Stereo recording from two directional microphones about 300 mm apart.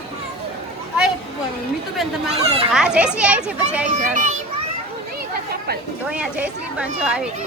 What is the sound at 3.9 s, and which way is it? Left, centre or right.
Speech, right.